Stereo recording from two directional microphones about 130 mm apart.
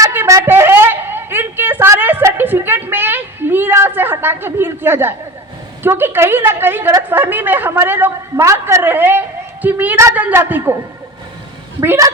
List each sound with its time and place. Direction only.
0.0 s a sound: 20° right (ahead or behind)
5.8 s a woman's voice: 15° right (ahead or behind)
11.8 s speech: 20° right (ahead or behind)